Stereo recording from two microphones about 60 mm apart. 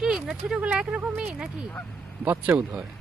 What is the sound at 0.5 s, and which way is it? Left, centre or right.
Speech, centre.